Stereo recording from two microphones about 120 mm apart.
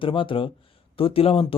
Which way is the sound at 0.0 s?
45° left (ahead or behind).